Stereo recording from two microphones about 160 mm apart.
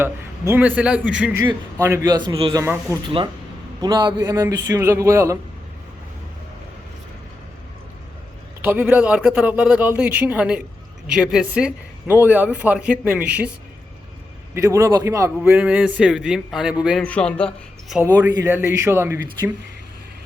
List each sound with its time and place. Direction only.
0.0 s speech: 15° right (ahead or behind)
2.0 s a man's voice: 25° right (ahead or behind)
8.6 s speech: 10° right (ahead or behind)
14.5 s a man's voice: 20° right (ahead or behind)
15.4 s a man's voice: 10° right (ahead or behind)
17.0 s speech: 5° left (ahead or behind)
18.0 s speech: 15° right (ahead or behind)